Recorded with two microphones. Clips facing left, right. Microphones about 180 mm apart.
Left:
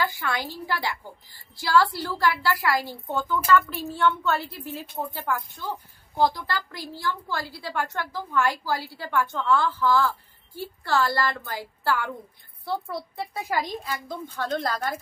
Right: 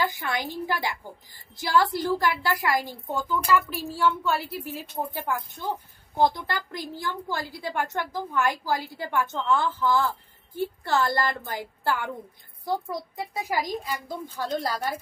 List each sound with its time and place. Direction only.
0.0 s a woman's voice: 20° right (ahead or behind)